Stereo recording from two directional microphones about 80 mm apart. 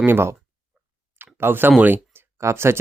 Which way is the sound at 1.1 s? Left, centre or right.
Right.